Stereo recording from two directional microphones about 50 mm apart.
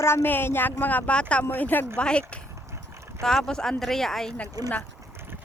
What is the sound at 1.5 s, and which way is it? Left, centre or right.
Speech, left.